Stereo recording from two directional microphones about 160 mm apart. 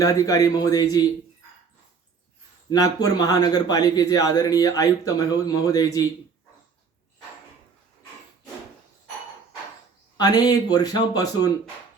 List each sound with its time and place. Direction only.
0.0 s a man's voice: 20° left (ahead or behind)
2.6 s a man's voice: 20° left (ahead or behind)
10.2 s a man's voice: 25° left (ahead or behind)